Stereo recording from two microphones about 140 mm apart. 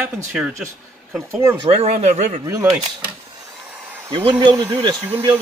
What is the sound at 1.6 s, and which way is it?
Speech, 45° right (ahead or behind).